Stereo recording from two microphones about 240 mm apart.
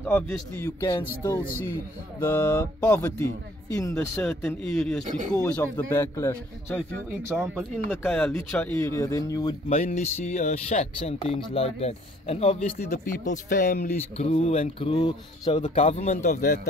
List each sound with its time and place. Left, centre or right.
0.1 s a man's voice: centre
2.3 s a man's voice: centre
5.0 s speech: right
5.3 s a man's voice: centre
7.1 s a man's voice: centre
9.7 s speech: left